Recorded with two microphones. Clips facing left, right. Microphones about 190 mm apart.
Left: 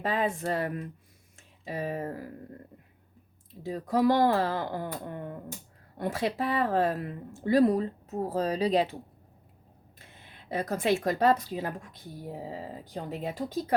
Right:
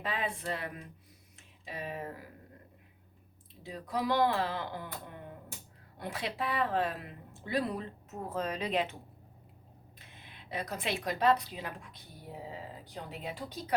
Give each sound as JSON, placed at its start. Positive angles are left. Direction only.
{"t": 0.0, "sound": "speech", "side_deg": 45}
{"t": 3.6, "sound": "speech", "side_deg": 45}
{"t": 10.3, "sound": "speech", "side_deg": 45}